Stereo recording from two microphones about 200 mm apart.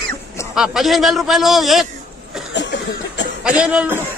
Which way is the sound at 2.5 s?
60° left (ahead or behind).